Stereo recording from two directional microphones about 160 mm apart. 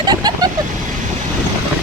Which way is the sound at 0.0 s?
25° right (ahead or behind).